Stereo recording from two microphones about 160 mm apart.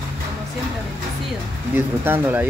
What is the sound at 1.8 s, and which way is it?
Speech, 15° right (ahead or behind).